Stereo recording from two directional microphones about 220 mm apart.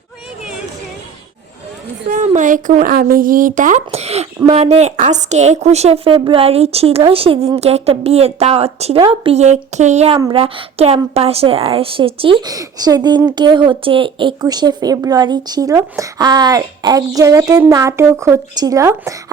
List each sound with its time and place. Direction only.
2.0 s a woman's voice: 35° right (ahead or behind); by 19.1 s 15° right (ahead or behind)